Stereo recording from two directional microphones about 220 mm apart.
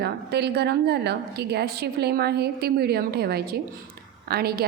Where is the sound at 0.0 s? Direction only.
50° right (ahead or behind).